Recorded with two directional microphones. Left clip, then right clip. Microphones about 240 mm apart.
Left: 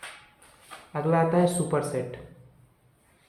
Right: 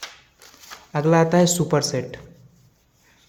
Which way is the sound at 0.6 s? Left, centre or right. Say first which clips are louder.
Right 7 dB; right.